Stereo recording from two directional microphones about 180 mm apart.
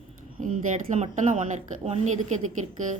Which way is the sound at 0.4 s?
45° right (ahead or behind).